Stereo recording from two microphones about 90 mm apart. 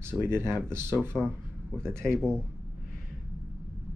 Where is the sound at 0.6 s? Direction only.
25° right (ahead or behind).